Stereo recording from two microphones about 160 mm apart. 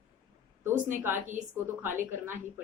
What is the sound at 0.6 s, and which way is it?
Speech, 15° right (ahead or behind).